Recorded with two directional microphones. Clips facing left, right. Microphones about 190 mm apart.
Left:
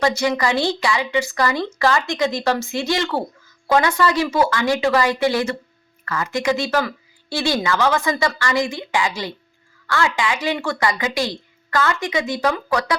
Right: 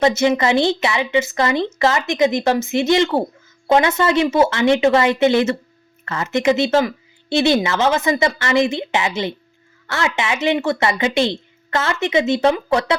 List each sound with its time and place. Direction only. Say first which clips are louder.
0.0 s speech: right 4 dB; 20° right (ahead or behind)